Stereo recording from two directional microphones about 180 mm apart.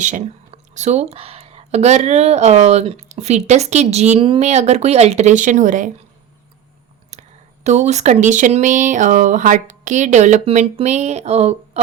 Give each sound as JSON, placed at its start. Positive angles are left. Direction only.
{"t": 0.0, "sound": "speech", "side_deg": -45}
{"t": 7.1, "sound": "speech", "side_deg": -40}